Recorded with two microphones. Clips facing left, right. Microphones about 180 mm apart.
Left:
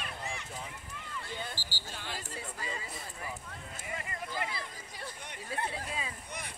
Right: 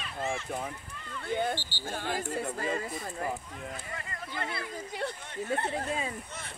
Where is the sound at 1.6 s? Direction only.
40° left (ahead or behind).